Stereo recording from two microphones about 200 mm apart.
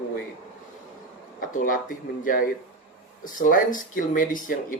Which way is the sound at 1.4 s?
45° left (ahead or behind).